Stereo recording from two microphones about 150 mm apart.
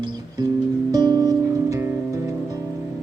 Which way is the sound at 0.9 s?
25° right (ahead or behind).